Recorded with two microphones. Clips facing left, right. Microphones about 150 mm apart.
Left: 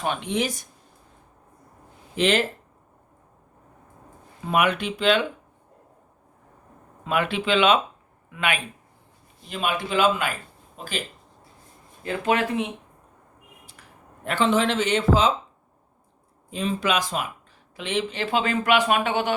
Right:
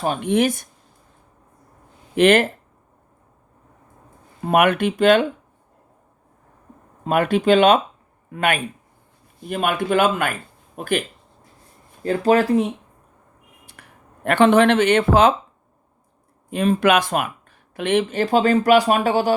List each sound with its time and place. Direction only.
0.0 s speech: 40° right (ahead or behind)
0.3 s speech: 55° right (ahead or behind)
2.1 s speech: 55° right (ahead or behind)
4.4 s a man's voice: 55° right (ahead or behind)
7.0 s a man's voice: 45° right (ahead or behind)
12.0 s speech: 35° right (ahead or behind)
13.8 s a sound: 60° right (ahead or behind)
14.3 s speech: 60° right (ahead or behind)
16.5 s speech: 60° right (ahead or behind); by 19.3 s 35° right (ahead or behind)